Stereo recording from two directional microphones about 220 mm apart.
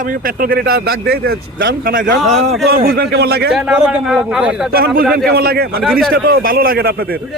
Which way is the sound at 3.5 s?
5° right (ahead or behind).